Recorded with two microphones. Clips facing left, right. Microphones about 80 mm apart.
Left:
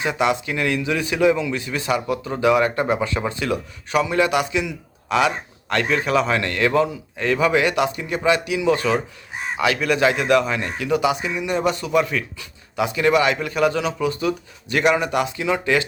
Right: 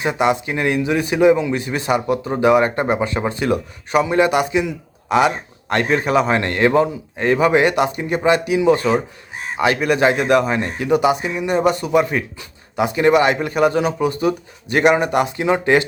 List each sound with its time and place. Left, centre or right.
0.0 s a man's voice: right
3.2 s a man's voice: right